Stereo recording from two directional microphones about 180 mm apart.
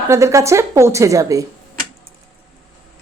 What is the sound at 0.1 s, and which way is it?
A woman's voice, 15° right (ahead or behind).